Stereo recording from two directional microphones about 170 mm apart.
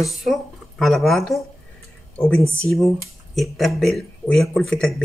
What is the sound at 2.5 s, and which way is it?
Speech, 5° left (ahead or behind).